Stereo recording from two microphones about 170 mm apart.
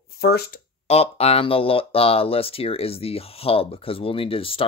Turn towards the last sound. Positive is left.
turn(degrees=30)  # may be behind; listen again after turning